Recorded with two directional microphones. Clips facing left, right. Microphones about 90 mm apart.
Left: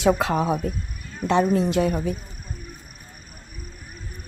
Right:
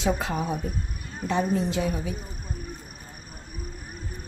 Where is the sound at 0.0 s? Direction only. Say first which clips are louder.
Left 6 dB; 70° left (ahead or behind).